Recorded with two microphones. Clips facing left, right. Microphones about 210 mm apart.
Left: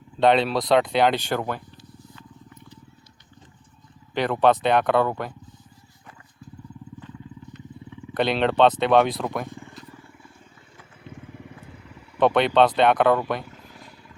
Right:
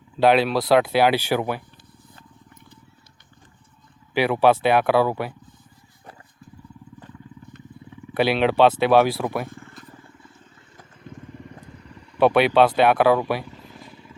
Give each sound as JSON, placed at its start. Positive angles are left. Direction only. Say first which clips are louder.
{"t": 0.2, "sound": "speech", "louder": "right 2 dB", "side_deg": -5}
{"t": 2.1, "sound": "wild animals", "louder": "left 3 dB", "side_deg": -50}
{"t": 4.1, "sound": "speech", "louder": "right 2 dB", "side_deg": -10}
{"t": 7.5, "sound": "wild animals", "louder": "left 2 dB", "side_deg": -50}
{"t": 8.1, "sound": "speech", "louder": "right 2 dB", "side_deg": -5}
{"t": 9.5, "sound": "vehicle", "louder": "left 2 dB", "side_deg": 15}
{"t": 11.0, "sound": "vehicle", "louder": "right 1 dB", "side_deg": 5}
{"t": 12.1, "sound": "speech", "louder": "right 2 dB", "side_deg": -5}